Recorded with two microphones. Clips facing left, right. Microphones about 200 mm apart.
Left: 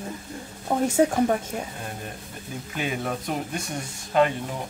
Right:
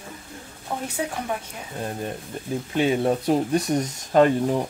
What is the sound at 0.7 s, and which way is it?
Speech, 45° left (ahead or behind).